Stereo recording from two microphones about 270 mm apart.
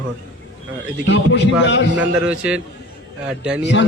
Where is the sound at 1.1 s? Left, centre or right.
Left.